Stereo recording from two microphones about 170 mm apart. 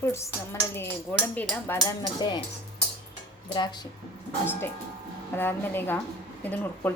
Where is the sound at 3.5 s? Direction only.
25° left (ahead or behind).